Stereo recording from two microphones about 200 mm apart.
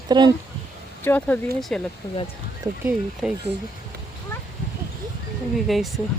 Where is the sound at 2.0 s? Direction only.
25° left (ahead or behind).